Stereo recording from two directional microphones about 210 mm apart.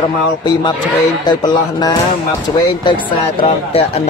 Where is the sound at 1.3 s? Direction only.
20° left (ahead or behind).